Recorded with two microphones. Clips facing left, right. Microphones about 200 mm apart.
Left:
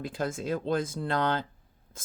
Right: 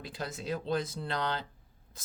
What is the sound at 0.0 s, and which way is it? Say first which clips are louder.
Speech: left 7 dB; 50° left (ahead or behind).